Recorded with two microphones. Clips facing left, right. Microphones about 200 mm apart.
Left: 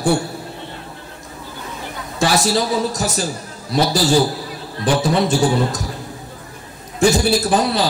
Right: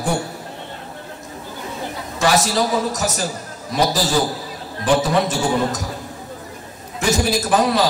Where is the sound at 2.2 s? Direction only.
30° left (ahead or behind).